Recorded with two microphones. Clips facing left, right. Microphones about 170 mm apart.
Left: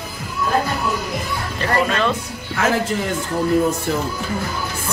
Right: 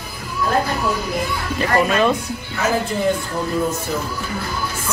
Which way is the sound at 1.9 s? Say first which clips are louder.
Right 3 dB; 15° right (ahead or behind).